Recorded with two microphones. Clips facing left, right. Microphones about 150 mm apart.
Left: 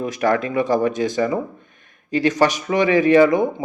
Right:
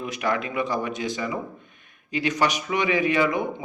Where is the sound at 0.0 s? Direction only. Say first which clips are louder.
Left 7 dB; 45° left (ahead or behind).